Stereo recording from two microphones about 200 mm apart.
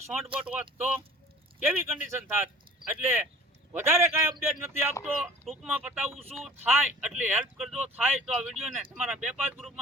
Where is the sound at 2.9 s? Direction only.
10° right (ahead or behind).